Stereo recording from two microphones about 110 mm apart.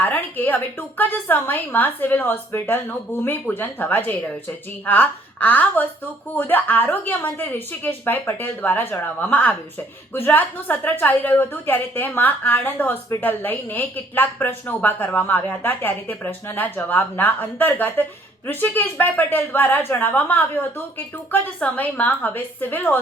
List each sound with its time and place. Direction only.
0.0 s speech: 15° left (ahead or behind)